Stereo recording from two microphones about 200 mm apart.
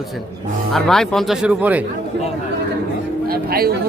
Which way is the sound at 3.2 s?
50° right (ahead or behind).